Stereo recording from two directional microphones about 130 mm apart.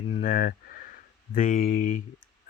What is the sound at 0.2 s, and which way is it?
Speech, 90° left.